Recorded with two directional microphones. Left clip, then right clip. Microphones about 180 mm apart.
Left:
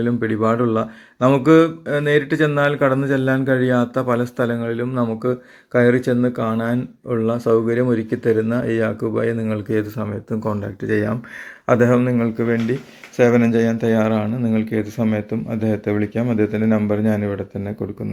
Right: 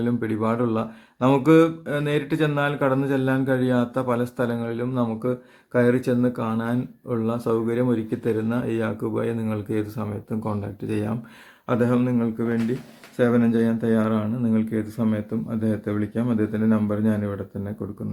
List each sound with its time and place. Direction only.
0.0 s speech: 10° left (ahead or behind)
11.6 s a man's voice: 20° left (ahead or behind)
11.9 s speech: 10° left (ahead or behind)